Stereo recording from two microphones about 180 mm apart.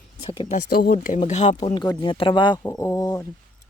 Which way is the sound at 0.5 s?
55° left (ahead or behind).